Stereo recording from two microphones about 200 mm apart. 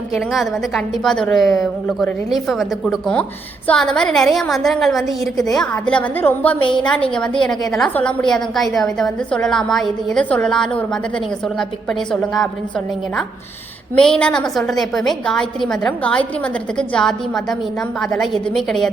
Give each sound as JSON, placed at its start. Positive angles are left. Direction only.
{"t": 0.1, "sound": "a woman's voice", "side_deg": 0}
{"t": 6.6, "sound": "a woman's voice", "side_deg": 25}
{"t": 7.1, "sound": "a woman's voice", "side_deg": 5}